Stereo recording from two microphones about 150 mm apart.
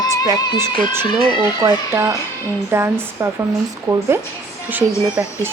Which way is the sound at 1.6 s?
20° right (ahead or behind).